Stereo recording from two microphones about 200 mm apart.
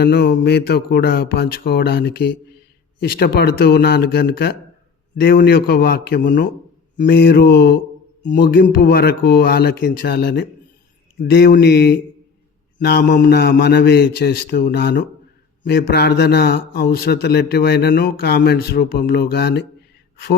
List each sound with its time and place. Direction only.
0.0 s a man's voice: 55° left (ahead or behind)